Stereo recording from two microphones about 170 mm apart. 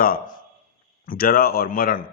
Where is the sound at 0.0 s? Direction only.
60° left (ahead or behind).